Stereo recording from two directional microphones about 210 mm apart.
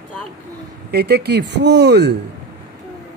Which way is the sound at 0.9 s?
50° right (ahead or behind).